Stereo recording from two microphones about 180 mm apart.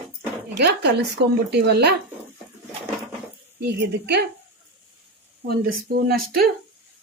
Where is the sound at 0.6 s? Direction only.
65° right (ahead or behind).